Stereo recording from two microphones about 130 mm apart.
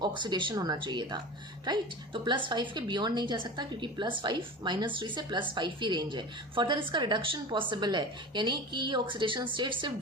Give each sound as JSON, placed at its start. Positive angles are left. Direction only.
{"t": 0.0, "sound": "a woman's voice", "side_deg": -35}